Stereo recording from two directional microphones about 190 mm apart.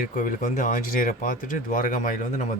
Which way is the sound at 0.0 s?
45° left (ahead or behind).